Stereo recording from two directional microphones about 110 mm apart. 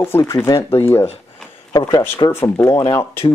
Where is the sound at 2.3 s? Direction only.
25° left (ahead or behind).